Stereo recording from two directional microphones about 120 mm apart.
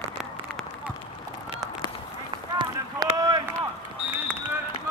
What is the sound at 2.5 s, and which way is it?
Run, 35° right (ahead or behind).